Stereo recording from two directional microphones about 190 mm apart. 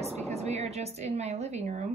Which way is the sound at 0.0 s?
35° right (ahead or behind).